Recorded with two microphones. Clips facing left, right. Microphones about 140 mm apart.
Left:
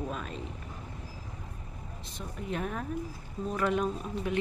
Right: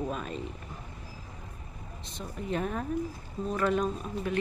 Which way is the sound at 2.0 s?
5° left (ahead or behind).